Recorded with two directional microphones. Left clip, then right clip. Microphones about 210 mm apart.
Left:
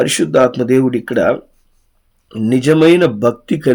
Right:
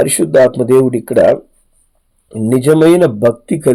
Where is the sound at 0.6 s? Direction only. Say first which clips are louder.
Right 3 dB; 35° right (ahead or behind).